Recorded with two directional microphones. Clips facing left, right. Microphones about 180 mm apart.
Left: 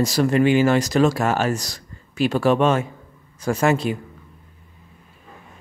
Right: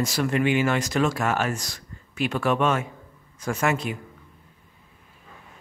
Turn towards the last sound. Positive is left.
turn(degrees=35)  # may be behind; listen again after turning